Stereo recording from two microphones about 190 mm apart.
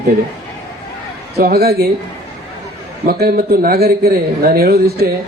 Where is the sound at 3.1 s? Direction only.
55° right (ahead or behind).